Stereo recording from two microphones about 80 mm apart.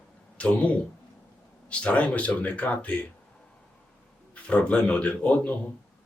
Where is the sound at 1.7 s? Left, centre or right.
Centre.